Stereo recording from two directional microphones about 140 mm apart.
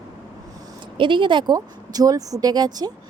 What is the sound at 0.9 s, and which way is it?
Speech, 35° right (ahead or behind).